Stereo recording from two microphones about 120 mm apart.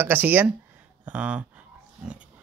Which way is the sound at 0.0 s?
15° right (ahead or behind).